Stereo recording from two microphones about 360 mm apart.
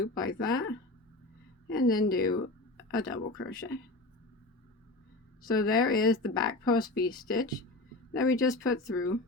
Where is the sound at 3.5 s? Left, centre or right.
Centre.